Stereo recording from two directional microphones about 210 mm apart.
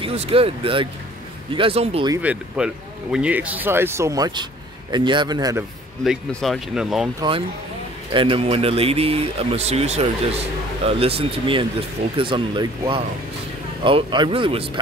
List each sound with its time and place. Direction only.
0.0 s speech: 30° right (ahead or behind)
2.2 s speech: 5° right (ahead or behind)
6.0 s speech: centre (ahead or behind)
7.2 s speech: 25° right (ahead or behind)